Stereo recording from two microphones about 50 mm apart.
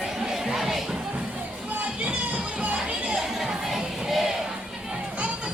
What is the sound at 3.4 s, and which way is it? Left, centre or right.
Music, centre.